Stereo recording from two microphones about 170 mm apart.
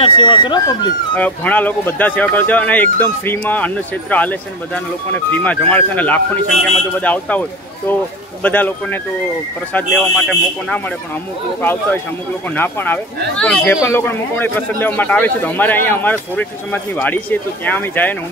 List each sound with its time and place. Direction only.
0.0 s speech: 30° left (ahead or behind)
1.1 s speech: 10° left (ahead or behind)